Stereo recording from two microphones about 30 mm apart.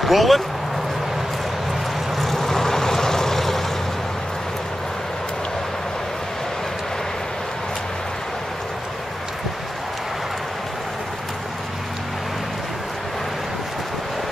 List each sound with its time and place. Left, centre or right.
0.0 s speech: centre
2.1 s vehicle: centre